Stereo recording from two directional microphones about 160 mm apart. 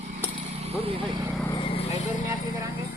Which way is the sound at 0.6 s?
40° right (ahead or behind).